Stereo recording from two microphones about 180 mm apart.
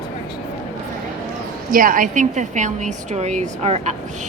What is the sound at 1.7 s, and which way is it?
A woman's voice, 50° right (ahead or behind).